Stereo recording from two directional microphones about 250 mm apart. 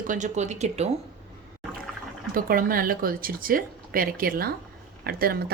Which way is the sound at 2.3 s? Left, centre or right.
Right.